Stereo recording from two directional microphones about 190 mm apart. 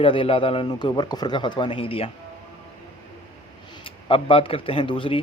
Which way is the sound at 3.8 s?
30° left (ahead or behind).